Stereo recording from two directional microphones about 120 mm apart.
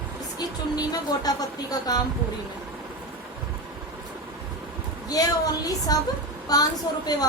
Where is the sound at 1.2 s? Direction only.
30° left (ahead or behind).